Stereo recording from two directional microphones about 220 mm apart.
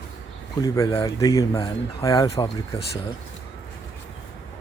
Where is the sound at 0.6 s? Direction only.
15° left (ahead or behind).